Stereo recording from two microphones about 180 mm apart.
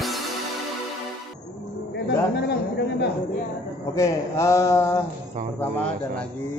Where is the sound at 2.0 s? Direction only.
65° left (ahead or behind).